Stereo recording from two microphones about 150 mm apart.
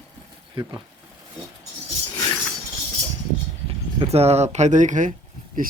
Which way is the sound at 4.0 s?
45° right (ahead or behind).